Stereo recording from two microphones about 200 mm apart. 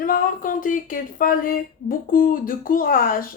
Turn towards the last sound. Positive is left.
turn(degrees=45)  # may be behind; listen again after turning